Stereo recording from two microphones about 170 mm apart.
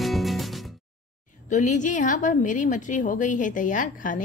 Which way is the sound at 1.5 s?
45° left (ahead or behind).